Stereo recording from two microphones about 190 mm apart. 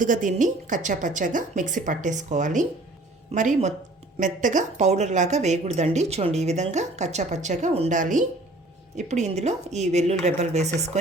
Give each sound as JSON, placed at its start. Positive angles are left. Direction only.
{"t": 0.0, "sound": "a woman's voice", "side_deg": -45}